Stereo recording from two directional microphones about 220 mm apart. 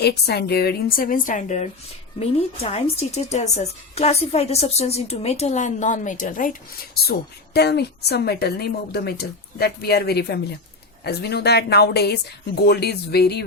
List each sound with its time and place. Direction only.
0.0 s a woman's voice: 45° left (ahead or behind)